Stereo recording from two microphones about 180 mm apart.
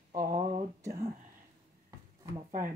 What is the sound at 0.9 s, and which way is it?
Speech, 35° right (ahead or behind).